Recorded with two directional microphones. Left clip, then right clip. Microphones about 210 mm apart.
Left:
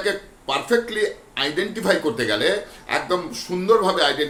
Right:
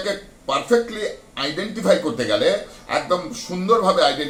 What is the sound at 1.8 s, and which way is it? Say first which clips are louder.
A man's voice: right 3 dB; 25° left (ahead or behind).